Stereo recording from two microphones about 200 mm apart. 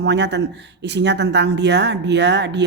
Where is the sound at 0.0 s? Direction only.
60° right (ahead or behind).